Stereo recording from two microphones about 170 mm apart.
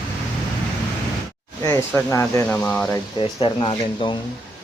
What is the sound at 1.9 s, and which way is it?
Speech, 10° left (ahead or behind).